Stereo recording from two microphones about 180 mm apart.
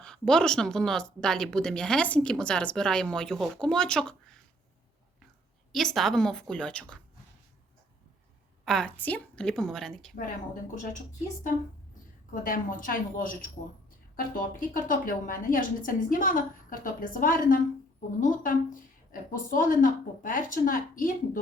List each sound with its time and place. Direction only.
0.0 s speech: 5° left (ahead or behind)
5.7 s speech: centre (ahead or behind)
8.6 s speech: 5° left (ahead or behind)
10.2 s a woman's voice: 50° left (ahead or behind)
12.3 s a woman's voice: 50° left (ahead or behind)